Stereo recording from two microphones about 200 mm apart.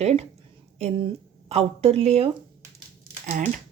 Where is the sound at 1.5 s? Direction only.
30° right (ahead or behind).